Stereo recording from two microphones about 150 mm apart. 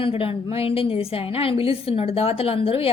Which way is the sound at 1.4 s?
40° left (ahead or behind).